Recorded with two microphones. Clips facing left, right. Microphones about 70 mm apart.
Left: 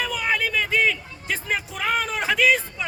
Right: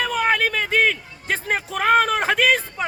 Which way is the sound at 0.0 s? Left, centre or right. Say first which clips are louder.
Right 4 dB; right.